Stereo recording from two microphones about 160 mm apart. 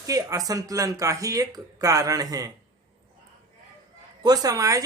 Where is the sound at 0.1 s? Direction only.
20° right (ahead or behind).